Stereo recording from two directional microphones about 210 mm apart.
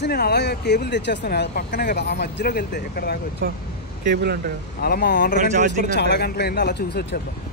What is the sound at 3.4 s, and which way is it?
Speech, 45° right (ahead or behind).